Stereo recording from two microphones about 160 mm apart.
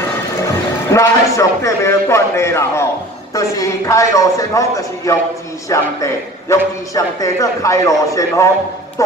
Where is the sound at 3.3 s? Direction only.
20° left (ahead or behind).